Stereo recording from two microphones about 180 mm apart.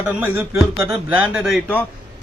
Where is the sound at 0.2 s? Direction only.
10° right (ahead or behind).